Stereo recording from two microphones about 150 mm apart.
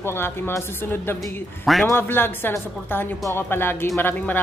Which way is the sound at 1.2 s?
Centre (ahead or behind).